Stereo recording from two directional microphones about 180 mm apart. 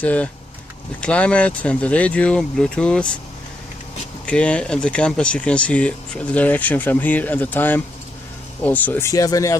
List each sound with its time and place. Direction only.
0.0 s speech: 10° left (ahead or behind)
4.3 s speech: 5° left (ahead or behind)